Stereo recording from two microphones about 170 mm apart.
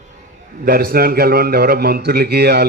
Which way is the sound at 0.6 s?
60° right (ahead or behind).